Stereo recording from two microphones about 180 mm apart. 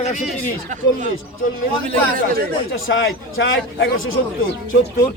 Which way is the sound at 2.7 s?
85° left.